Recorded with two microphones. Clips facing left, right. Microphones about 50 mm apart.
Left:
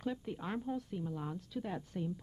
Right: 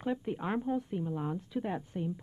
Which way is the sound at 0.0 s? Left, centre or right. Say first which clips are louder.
Right 5 dB; right.